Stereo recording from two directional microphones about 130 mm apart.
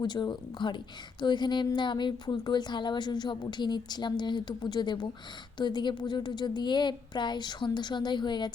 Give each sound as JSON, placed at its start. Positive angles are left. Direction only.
{"t": 0.0, "sound": "a woman's voice", "side_deg": 35}